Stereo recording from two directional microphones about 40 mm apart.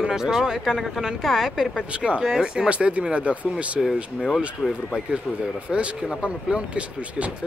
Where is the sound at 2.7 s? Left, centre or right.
Right.